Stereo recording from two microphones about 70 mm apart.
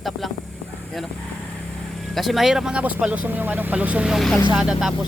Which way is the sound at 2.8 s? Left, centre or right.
Centre.